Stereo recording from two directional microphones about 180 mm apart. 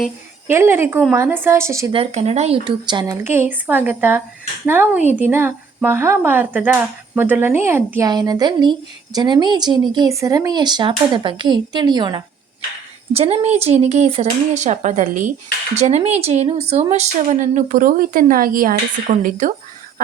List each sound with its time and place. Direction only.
0.4 s speech: 10° right (ahead or behind)
1.9 s speech: 35° right (ahead or behind)
3.2 s speech: 10° right (ahead or behind)
13.1 s speech: 35° right (ahead or behind)